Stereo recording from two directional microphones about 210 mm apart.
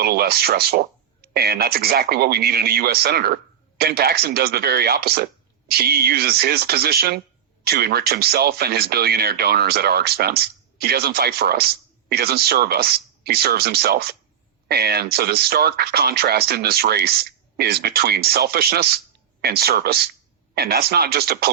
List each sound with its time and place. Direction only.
0.0 s speech: 50° right (ahead or behind)